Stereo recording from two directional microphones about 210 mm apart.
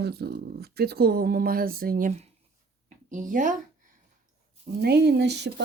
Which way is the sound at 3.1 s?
40° right (ahead or behind).